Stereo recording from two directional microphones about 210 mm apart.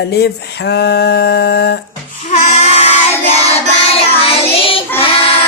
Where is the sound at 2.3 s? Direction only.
35° left (ahead or behind).